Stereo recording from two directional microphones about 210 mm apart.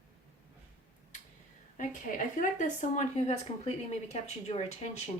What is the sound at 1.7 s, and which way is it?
A woman's voice, 35° left (ahead or behind).